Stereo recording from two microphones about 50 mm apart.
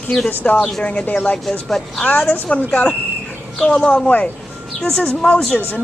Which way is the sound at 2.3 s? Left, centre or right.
Left.